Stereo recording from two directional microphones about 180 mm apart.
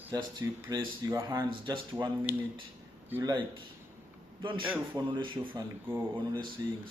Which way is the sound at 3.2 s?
25° right (ahead or behind).